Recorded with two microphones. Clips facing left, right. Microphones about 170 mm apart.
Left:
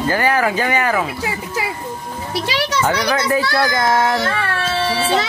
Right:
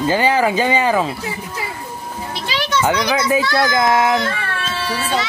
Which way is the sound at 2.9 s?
15° right (ahead or behind).